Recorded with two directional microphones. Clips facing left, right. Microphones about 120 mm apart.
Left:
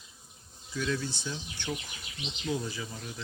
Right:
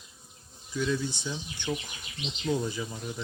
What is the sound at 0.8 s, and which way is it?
Speech, 15° right (ahead or behind).